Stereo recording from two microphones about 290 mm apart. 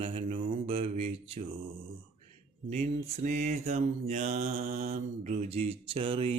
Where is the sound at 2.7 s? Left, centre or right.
Right.